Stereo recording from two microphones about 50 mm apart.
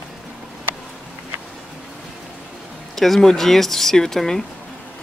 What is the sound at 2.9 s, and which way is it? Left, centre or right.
Speech, centre.